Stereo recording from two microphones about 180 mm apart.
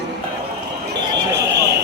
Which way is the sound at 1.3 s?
65° right (ahead or behind).